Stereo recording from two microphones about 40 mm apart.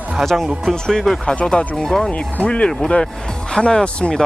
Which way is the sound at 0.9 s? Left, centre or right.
Centre.